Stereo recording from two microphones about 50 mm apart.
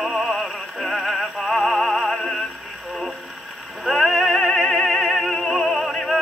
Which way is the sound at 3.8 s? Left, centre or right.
Centre.